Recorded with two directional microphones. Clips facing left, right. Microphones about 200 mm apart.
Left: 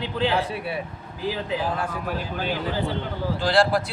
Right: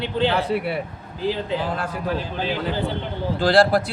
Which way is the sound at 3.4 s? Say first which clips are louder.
Right 4 dB; 35° right (ahead or behind).